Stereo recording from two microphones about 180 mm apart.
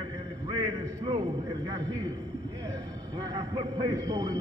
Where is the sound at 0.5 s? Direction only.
30° right (ahead or behind).